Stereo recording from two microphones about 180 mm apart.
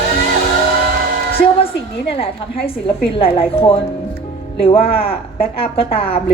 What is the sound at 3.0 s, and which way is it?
Speech, 30° left (ahead or behind).